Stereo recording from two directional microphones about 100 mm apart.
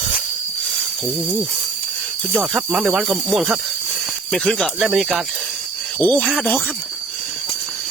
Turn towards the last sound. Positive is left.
turn(degrees=15)  # may be behind; listen again after turning